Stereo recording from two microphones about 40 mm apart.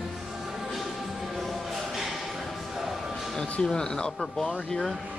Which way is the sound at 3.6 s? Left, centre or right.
Centre.